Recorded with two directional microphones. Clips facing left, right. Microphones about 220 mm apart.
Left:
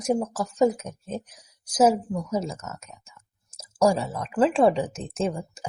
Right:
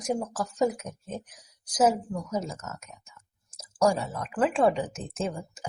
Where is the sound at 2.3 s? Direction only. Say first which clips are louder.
Left 3 dB; 30° left (ahead or behind).